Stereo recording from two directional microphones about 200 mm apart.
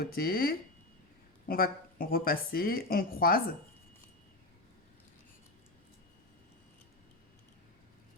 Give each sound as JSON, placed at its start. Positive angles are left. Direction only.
{"t": 0.0, "sound": "speech", "side_deg": 50}